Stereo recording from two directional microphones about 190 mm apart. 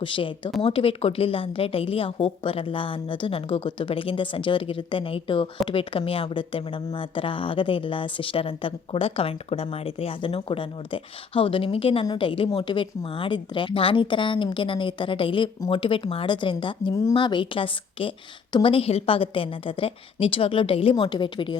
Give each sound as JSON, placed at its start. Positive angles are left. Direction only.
{"t": 0.0, "sound": "a woman's voice", "side_deg": 25}